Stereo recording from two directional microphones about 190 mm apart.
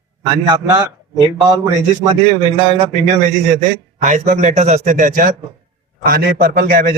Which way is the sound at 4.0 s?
40° right (ahead or behind).